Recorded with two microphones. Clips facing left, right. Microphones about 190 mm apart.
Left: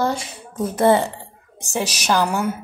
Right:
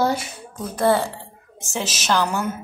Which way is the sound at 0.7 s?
20° left (ahead or behind).